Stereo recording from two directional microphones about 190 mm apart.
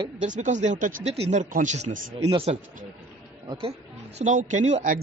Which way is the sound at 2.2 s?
30° right (ahead or behind).